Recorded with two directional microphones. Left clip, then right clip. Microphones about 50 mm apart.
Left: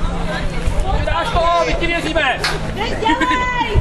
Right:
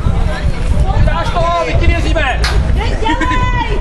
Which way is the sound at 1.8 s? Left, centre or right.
Centre.